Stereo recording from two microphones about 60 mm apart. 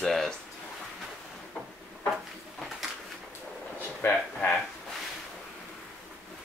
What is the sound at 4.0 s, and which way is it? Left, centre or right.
Speech, left.